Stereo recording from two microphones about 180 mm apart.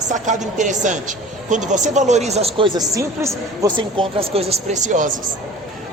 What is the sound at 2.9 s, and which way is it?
Speech, 15° right (ahead or behind).